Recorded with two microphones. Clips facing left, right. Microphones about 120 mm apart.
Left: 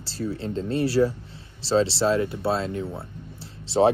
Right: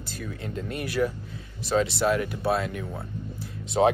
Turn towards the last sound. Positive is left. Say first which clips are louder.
# left 2 dB
turn(degrees=30)  # may be behind; listen again after turning